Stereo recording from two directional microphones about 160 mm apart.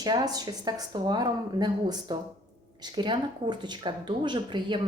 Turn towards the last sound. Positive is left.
turn(degrees=-30)  # may be behind; listen again after turning